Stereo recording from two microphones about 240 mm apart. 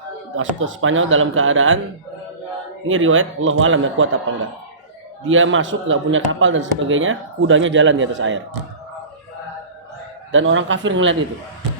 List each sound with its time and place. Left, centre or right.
0.3 s speech: right
2.8 s speech: right
5.2 s a man's voice: right
10.3 s a man's voice: right